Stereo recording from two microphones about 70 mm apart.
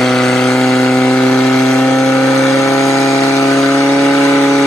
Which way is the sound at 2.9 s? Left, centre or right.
Left.